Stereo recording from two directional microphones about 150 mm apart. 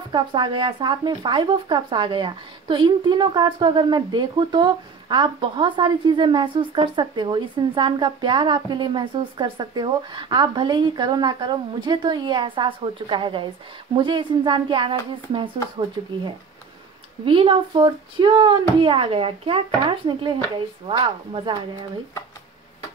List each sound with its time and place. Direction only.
0.1 s speech: 30° right (ahead or behind)
17.2 s speech: 35° right (ahead or behind)